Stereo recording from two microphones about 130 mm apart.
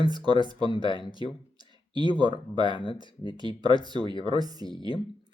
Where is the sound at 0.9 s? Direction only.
40° left (ahead or behind).